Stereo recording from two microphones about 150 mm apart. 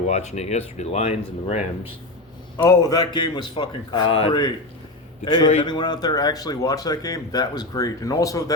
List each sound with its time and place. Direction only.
0.1 s speech: 50° left (ahead or behind)
2.6 s a man's voice: 25° left (ahead or behind)